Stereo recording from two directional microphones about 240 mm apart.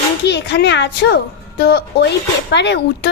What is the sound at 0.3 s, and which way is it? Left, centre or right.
A woman's voice, left.